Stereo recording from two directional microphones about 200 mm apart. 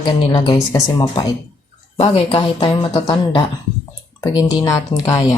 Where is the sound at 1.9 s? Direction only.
30° left (ahead or behind).